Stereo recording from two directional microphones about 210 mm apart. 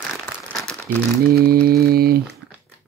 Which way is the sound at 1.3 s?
45° right (ahead or behind).